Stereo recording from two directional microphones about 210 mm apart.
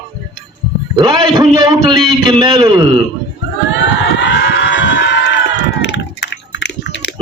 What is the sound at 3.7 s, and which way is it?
Crowd, 60° left (ahead or behind).